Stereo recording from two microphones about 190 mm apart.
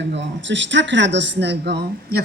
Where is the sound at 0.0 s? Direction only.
70° right (ahead or behind).